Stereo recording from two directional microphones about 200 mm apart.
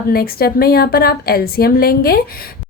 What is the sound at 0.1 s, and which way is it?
A woman's voice, 50° left (ahead or behind).